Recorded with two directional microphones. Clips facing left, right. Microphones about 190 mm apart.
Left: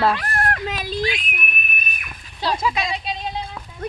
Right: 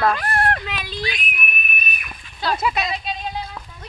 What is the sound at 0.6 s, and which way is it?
Speech, 40° left (ahead or behind).